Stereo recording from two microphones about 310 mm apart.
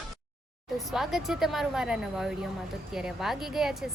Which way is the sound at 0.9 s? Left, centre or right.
Centre.